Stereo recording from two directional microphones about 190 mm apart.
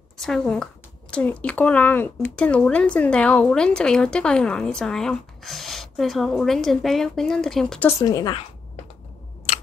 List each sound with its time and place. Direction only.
0.2 s speech: 5° left (ahead or behind)
8.0 s a woman's voice: 20° left (ahead or behind)